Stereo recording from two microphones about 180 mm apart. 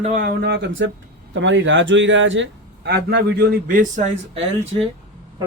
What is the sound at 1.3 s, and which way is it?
A man's voice, 90° right.